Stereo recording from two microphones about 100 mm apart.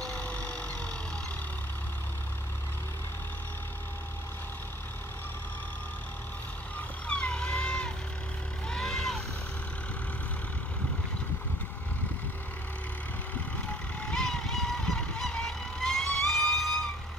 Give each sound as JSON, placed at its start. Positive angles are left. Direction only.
{"t": 0.0, "sound": "vehicle", "side_deg": 15}
{"t": 7.1, "sound": "vehicle", "side_deg": 10}
{"t": 14.0, "sound": "vehicle", "side_deg": 5}